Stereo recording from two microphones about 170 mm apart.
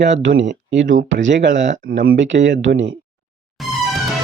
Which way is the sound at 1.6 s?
55° right (ahead or behind).